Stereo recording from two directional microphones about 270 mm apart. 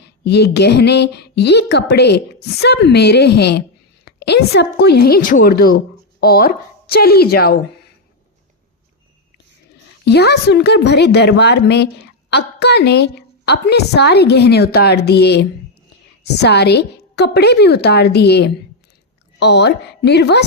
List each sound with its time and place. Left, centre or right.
0.0 s a woman's voice: left
10.1 s speech: left